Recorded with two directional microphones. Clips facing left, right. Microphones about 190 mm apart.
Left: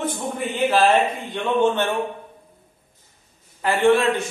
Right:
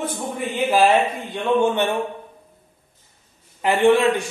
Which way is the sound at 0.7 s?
10° right (ahead or behind).